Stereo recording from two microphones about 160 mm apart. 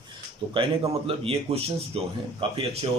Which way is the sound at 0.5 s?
35° right (ahead or behind).